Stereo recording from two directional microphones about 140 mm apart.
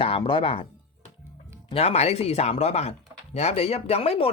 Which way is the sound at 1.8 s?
50° left (ahead or behind).